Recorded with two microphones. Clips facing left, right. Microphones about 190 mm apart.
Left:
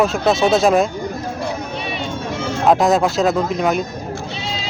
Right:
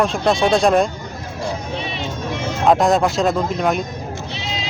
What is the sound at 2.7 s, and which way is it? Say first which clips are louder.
Speech: even; centre (ahead or behind).